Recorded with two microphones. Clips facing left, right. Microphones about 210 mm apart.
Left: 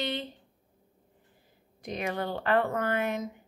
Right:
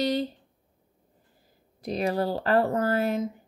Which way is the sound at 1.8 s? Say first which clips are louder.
Right 6 dB; 35° right (ahead or behind).